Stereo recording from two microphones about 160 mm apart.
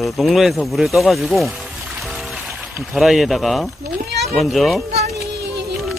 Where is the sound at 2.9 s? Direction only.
Centre (ahead or behind).